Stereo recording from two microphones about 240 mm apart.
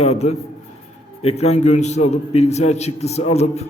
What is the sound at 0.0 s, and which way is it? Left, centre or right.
A man's voice, left.